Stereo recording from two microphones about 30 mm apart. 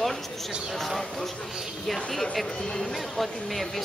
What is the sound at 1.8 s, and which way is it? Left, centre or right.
A man's voice, centre.